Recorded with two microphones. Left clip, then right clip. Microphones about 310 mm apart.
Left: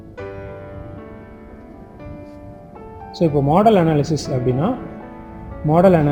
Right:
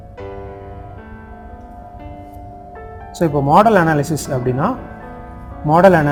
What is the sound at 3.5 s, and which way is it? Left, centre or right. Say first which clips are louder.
Speech: right 4 dB; right.